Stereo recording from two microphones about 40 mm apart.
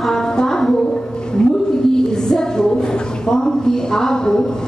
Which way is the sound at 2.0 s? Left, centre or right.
Centre.